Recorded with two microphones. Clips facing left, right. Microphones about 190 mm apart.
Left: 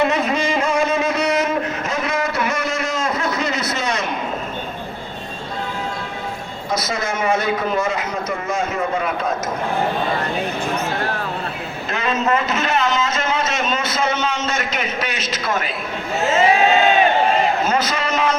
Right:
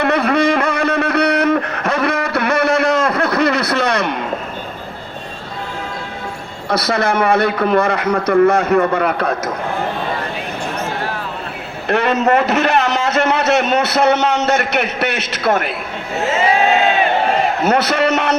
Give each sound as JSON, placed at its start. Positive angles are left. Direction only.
{"t": 0.0, "sound": "a sound", "side_deg": -65}
{"t": 6.7, "sound": "a man's voice", "side_deg": -65}
{"t": 11.9, "sound": "a man's voice", "side_deg": -65}
{"t": 17.6, "sound": "a man's voice", "side_deg": -65}